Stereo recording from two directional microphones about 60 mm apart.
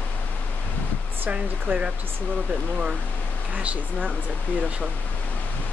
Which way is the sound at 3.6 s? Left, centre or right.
Centre.